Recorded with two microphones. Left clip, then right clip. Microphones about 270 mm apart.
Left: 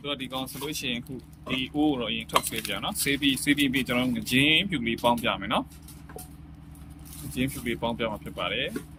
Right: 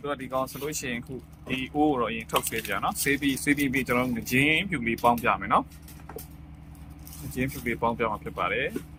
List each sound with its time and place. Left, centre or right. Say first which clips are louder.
0.0 s speech: right 3 dB; centre
7.3 s speech: right 1 dB; centre